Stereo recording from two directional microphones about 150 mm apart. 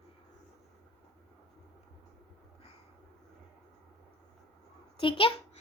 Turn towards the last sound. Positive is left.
turn(degrees=35)  # may be behind; listen again after turning